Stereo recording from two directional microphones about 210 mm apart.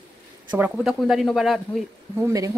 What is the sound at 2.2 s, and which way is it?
Speech, 15° right (ahead or behind).